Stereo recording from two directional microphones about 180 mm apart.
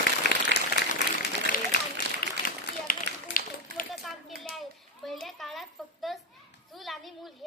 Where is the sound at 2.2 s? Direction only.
55° left (ahead or behind).